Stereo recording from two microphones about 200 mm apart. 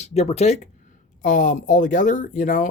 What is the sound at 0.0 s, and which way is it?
Speech, 30° left (ahead or behind).